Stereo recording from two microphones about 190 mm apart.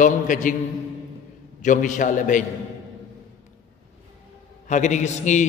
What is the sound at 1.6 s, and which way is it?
Speech, 40° left (ahead or behind).